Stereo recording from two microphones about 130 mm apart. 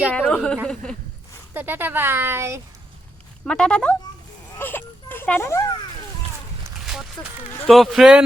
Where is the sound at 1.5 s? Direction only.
15° right (ahead or behind).